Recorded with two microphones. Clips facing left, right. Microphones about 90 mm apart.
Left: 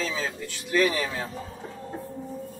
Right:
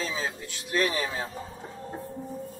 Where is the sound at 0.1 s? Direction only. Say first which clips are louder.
Left 1 dB; 15° right (ahead or behind).